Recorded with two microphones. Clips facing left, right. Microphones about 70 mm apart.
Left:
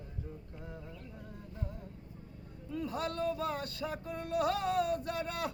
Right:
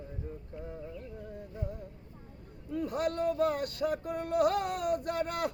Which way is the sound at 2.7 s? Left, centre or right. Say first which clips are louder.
Right 4 dB; right.